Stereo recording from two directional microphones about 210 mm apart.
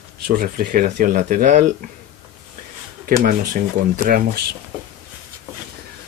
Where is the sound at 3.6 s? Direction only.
40° right (ahead or behind).